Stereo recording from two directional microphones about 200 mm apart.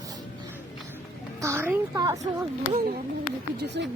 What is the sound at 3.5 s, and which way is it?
Speech, 55° right (ahead or behind).